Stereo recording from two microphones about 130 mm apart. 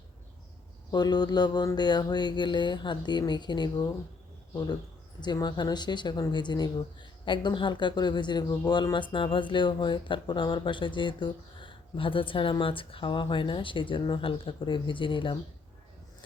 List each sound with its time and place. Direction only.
0.9 s speech: 30° left (ahead or behind)